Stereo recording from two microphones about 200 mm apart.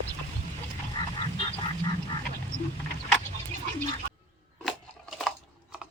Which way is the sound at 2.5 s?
35° right (ahead or behind).